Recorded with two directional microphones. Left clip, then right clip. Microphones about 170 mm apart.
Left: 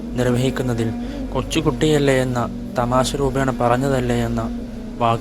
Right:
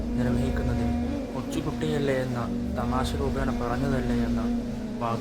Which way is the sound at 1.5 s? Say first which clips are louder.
Left 12 dB; 50° left (ahead or behind).